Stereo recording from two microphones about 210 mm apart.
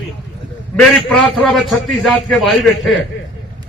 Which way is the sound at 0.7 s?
5° left (ahead or behind).